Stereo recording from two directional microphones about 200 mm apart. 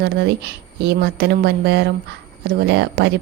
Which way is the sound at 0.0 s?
55° right (ahead or behind).